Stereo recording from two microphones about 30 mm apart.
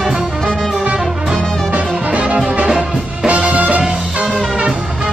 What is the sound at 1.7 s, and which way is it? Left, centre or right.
Music, right.